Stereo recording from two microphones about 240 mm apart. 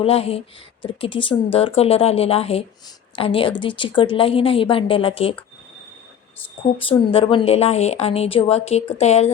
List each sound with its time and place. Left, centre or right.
0.0 s speech: left
6.7 s speech: left